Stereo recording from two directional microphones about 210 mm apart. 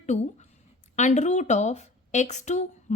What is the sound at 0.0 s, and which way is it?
A woman's voice, 35° left (ahead or behind).